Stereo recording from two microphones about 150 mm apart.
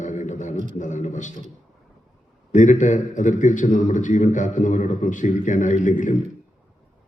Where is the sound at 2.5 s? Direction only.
55° left (ahead or behind).